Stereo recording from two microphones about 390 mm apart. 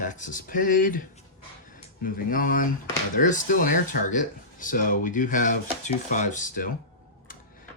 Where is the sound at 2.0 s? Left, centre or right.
Left.